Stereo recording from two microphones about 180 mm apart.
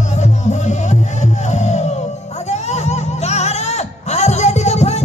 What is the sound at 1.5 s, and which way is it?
Music, 40° left (ahead or behind).